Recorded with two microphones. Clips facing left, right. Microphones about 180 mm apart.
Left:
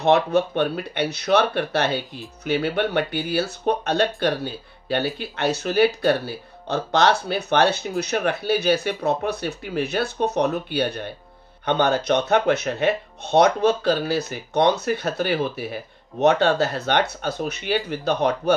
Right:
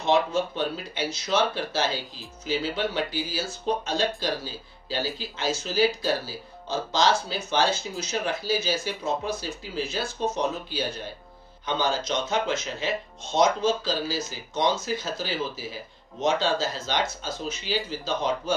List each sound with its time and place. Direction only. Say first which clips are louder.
0.0 s speech: left 5 dB; 65° left (ahead or behind)